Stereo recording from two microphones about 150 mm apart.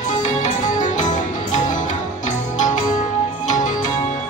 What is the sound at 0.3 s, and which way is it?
Music, 55° left (ahead or behind).